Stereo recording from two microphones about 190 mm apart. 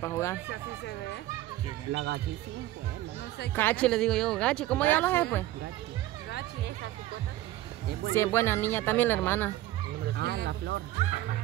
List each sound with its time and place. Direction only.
0.0 s speech: 15° left (ahead or behind)
1.9 s speech: 70° right (ahead or behind)
3.5 s speech: 10° left (ahead or behind)
8.1 s speech: 15° left (ahead or behind)
10.1 s speech: 60° right (ahead or behind)